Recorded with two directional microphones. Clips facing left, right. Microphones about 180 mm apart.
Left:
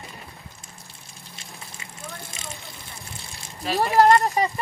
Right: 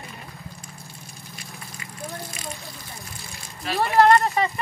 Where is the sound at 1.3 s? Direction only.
25° left (ahead or behind).